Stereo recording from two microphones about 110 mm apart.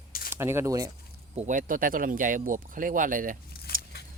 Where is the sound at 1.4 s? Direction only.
70° right (ahead or behind).